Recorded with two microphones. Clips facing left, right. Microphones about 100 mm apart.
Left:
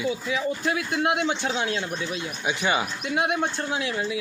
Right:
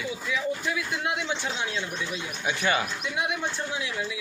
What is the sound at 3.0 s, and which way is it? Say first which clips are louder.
A man's voice: left 5 dB; 55° left (ahead or behind).